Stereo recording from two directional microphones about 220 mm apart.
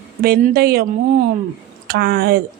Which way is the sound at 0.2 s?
45° right (ahead or behind).